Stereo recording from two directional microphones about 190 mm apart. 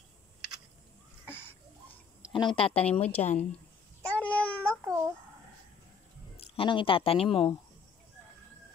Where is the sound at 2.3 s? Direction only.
25° left (ahead or behind).